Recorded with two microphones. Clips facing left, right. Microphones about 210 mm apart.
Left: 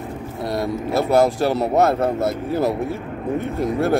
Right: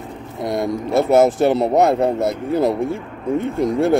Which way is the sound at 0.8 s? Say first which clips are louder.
Right 4 dB; centre (ahead or behind).